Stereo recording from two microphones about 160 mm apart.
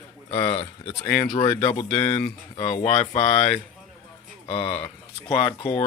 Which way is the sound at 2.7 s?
40° left (ahead or behind).